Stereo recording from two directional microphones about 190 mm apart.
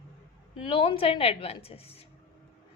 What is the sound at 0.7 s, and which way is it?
A woman's voice, 30° left (ahead or behind).